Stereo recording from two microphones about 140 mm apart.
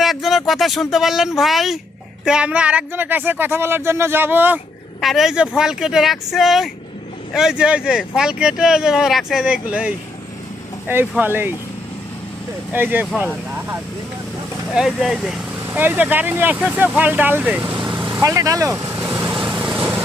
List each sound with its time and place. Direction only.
0.0 s speech: centre (ahead or behind)
4.9 s speech: centre (ahead or behind)
11.2 s speech: 15° right (ahead or behind)
12.7 s speech: 15° right (ahead or behind)
14.8 s speech: 5° right (ahead or behind)
17.8 s vehicle: 10° right (ahead or behind)
18.2 s vehicle: 25° right (ahead or behind)